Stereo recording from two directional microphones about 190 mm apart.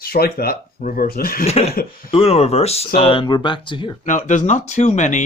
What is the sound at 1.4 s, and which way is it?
Speech, 35° left (ahead or behind).